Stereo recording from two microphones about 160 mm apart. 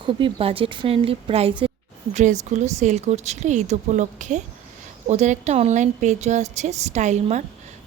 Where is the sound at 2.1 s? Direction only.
50° right (ahead or behind).